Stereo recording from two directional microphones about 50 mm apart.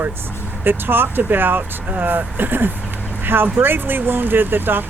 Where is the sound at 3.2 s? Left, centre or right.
Right.